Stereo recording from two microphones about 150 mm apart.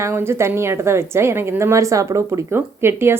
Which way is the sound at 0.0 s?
15° right (ahead or behind).